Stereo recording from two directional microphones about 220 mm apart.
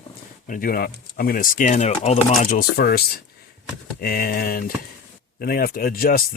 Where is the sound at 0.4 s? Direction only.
40° left (ahead or behind).